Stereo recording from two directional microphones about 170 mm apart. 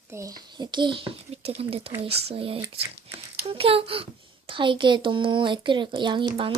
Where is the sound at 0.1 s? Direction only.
20° right (ahead or behind).